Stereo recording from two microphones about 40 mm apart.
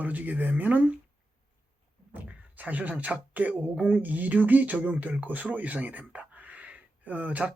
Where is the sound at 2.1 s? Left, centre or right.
Right.